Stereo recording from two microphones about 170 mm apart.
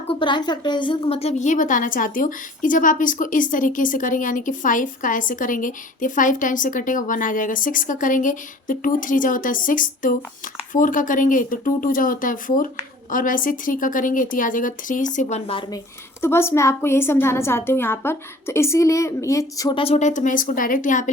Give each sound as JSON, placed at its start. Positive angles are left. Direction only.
{"t": 0.1, "sound": "a woman's voice", "side_deg": 30}
{"t": 15.4, "sound": "a woman's voice", "side_deg": 30}
{"t": 16.2, "sound": "a woman's voice", "side_deg": 15}
{"t": 19.8, "sound": "a woman's voice", "side_deg": 40}